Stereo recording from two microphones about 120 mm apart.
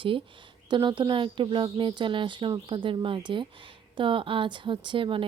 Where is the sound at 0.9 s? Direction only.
40° right (ahead or behind).